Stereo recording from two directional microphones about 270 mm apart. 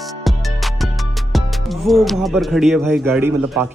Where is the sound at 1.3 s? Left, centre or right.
Centre.